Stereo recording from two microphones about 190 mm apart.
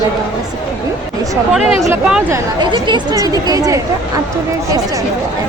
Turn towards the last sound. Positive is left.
turn(degrees=-20)  # may be behind; listen again after turning